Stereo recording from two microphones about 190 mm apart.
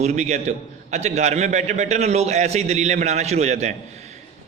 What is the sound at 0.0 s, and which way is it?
A man's voice, 35° right (ahead or behind).